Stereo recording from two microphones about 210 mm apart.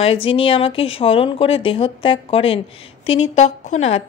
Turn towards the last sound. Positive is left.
turn(degrees=30)  # may be behind; listen again after turning